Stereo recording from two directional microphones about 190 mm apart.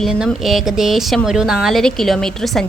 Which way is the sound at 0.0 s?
Centre (ahead or behind).